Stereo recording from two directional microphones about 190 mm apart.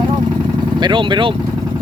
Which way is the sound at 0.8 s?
25° right (ahead or behind).